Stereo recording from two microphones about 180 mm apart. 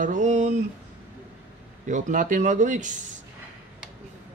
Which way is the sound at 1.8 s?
45° right (ahead or behind).